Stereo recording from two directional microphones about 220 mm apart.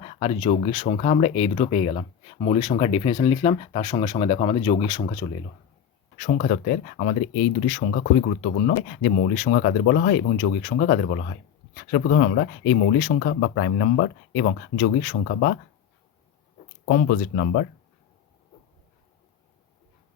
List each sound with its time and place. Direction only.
0.0 s speech: 25° left (ahead or behind)
6.1 s speech: 35° left (ahead or behind)
16.9 s speech: 50° left (ahead or behind)